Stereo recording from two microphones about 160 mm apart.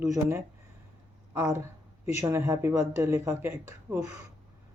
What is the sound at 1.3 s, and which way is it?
Speech, 20° right (ahead or behind).